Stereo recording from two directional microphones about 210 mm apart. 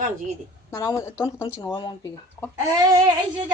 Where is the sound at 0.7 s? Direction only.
15° left (ahead or behind).